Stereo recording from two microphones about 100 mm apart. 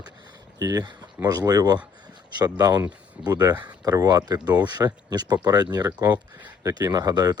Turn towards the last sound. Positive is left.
turn(degrees=-40)  # may be behind; listen again after turning